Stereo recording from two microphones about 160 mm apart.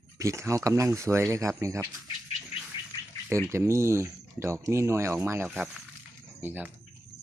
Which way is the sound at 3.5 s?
15° right (ahead or behind).